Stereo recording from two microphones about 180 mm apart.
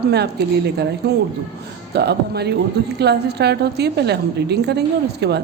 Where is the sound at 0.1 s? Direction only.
65° right (ahead or behind).